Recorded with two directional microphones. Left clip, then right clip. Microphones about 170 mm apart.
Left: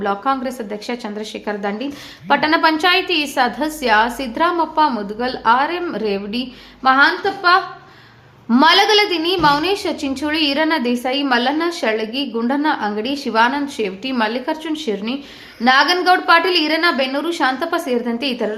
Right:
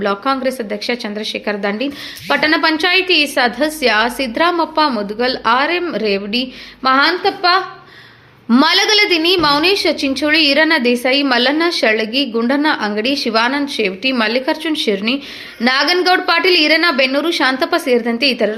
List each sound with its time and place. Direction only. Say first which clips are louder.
0.0 s a woman's voice: right 3 dB; 15° right (ahead or behind)